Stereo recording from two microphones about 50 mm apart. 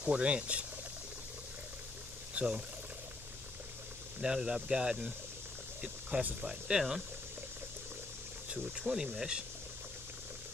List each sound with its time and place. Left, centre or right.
0.0 s speech: right
2.3 s speech: right
4.2 s speech: centre
5.8 s a sound: centre
6.4 s speech: centre
8.7 s speech: centre